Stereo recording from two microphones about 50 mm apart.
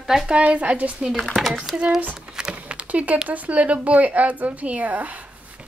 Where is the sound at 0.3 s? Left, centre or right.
Right.